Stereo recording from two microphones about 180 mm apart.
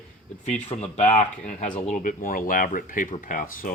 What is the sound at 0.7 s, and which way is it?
Speech, 30° left (ahead or behind).